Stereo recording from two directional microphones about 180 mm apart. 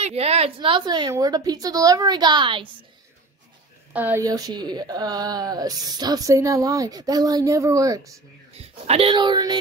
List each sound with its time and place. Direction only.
0.0 s speech: 35° right (ahead or behind)
3.9 s a woman's voice: 10° right (ahead or behind)
4.2 s speech: 20° right (ahead or behind)
8.5 s speech: 35° right (ahead or behind)